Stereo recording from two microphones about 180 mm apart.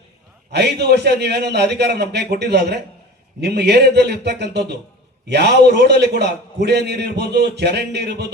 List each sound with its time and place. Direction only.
0.5 s a man's voice: 70° right (ahead or behind)